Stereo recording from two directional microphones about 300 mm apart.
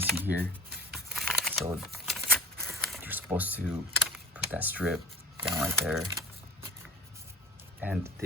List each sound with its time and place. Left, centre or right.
0.2 s speech: centre
0.7 s a sound: right
0.9 s computer keyboard: centre
1.6 s shuffling cards: centre
5.5 s speech: centre
7.8 s speech: centre